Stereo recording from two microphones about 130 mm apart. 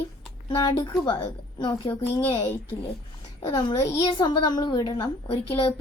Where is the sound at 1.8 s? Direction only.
15° left (ahead or behind).